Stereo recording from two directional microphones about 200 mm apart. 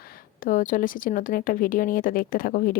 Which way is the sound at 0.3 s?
40° left (ahead or behind).